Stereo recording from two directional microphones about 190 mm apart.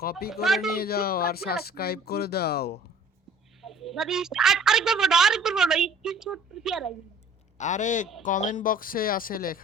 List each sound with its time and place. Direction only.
0.0 s speech: 55° left (ahead or behind)
0.4 s a woman's voice: centre (ahead or behind)
0.8 s speech: 55° left (ahead or behind)
3.6 s a woman's voice: centre (ahead or behind)
7.6 s speech: 40° left (ahead or behind)